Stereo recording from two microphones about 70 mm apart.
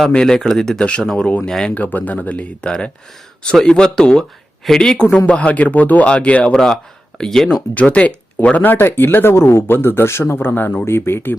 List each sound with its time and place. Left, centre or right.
0.1 s speech: centre
1.7 s speech: left
7.7 s speech: left